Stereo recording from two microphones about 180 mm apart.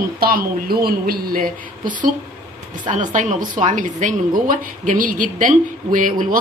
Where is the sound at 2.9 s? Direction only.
45° right (ahead or behind).